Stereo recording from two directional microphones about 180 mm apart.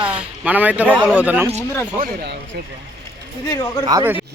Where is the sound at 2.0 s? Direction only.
60° right (ahead or behind).